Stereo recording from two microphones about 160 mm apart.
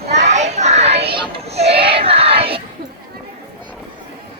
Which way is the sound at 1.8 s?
35° right (ahead or behind).